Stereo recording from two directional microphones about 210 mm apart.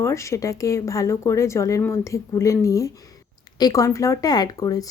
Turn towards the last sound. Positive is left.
turn(degrees=15)  # may be behind; listen again after turning